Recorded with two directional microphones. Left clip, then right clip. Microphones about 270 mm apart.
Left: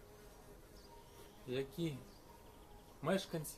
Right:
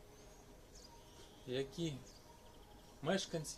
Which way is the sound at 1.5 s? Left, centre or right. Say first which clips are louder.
Even; centre.